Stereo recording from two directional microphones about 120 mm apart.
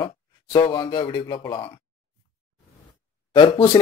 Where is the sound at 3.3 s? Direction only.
40° left (ahead or behind).